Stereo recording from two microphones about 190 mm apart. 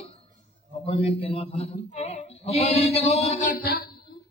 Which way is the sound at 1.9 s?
35° left (ahead or behind).